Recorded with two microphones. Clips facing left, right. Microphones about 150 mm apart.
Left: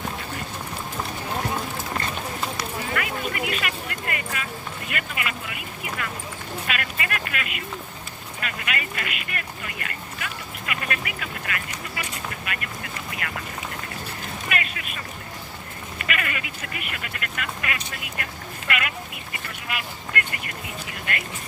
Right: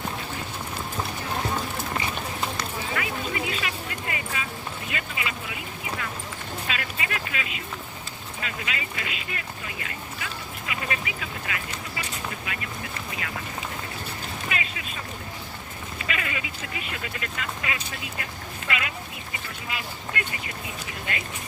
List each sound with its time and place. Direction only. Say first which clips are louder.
2.0 s run: left 1 dB; 5° right (ahead or behind)
2.9 s speech: left 1 dB; 60° left (ahead or behind)
6.7 s speech: left 3 dB; 65° left (ahead or behind)
11.9 s vehicle: left 1 dB; 65° left (ahead or behind)
14.5 s boat: left 2 dB; 65° left (ahead or behind)
16.0 s speech: left 2 dB; 65° left (ahead or behind)
19.6 s speech: left 2 dB; 65° left (ahead or behind)